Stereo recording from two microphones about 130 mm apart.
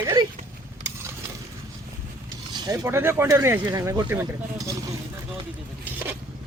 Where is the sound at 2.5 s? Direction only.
30° right (ahead or behind).